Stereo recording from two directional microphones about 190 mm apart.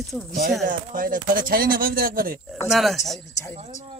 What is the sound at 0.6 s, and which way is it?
Speech, 45° right (ahead or behind).